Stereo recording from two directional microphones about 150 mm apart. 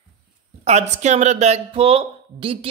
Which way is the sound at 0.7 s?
50° right (ahead or behind).